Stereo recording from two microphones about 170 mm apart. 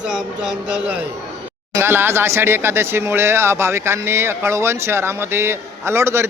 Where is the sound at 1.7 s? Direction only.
15° right (ahead or behind).